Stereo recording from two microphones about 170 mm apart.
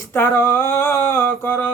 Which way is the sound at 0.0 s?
15° left (ahead or behind).